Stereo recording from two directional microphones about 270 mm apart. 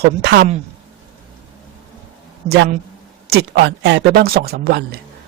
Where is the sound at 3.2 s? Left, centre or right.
Right.